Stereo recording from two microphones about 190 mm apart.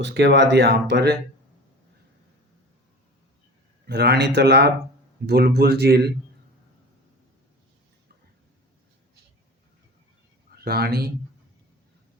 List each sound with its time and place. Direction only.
0.0 s speech: 65° right (ahead or behind)
3.8 s speech: 60° right (ahead or behind)
10.5 s speech: 55° right (ahead or behind)